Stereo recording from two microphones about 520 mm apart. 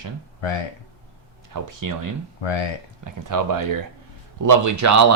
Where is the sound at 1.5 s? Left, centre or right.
Right.